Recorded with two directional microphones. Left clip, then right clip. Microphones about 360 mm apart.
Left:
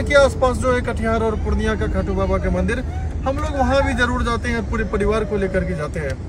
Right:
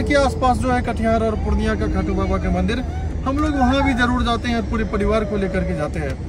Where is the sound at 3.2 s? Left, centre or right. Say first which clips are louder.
Right 1 dB; centre.